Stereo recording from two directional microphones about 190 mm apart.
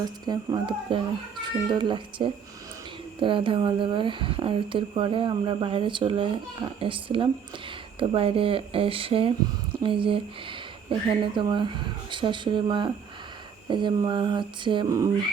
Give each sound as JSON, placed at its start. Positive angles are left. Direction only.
{"t": 0.0, "sound": "speech", "side_deg": -20}